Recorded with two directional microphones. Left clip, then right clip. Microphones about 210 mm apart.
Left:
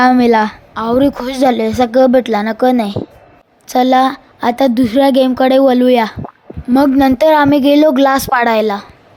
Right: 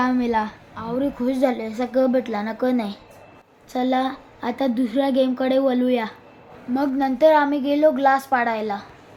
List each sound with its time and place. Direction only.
0.0 s a woman's voice: 45° left (ahead or behind)